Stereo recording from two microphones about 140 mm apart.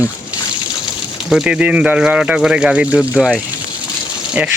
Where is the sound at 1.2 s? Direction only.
5° right (ahead or behind).